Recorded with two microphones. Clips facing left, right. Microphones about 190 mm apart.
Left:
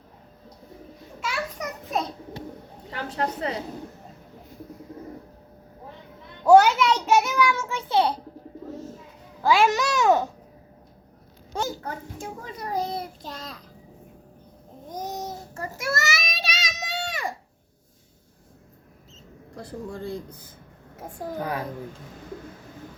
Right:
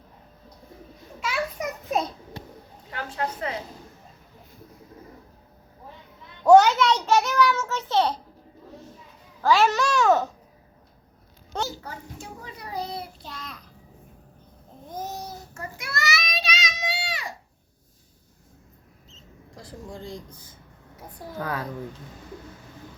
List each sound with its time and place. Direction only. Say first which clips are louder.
1.2 s children playing: right 2 dB; 5° right (ahead or behind)
2.9 s a sound: left 2 dB; 30° left (ahead or behind)
6.4 s child singing: even; 10° left (ahead or behind)
9.4 s a child's voice: even; 15° left (ahead or behind)
11.8 s a child's voice: left 5 dB; 50° left (ahead or behind)
14.8 s babbling: left 2 dB; 15° left (ahead or behind)
15.5 s child singing: left 6 dB; 40° left (ahead or behind)
19.5 s speech: left 5 dB; 60° left (ahead or behind)
21.3 s a child's voice: even; 15° left (ahead or behind)